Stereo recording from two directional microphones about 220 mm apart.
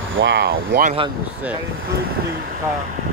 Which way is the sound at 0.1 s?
55° right (ahead or behind).